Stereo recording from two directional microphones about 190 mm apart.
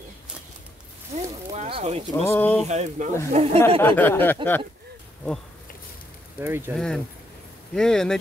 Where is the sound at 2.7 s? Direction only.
35° right (ahead or behind).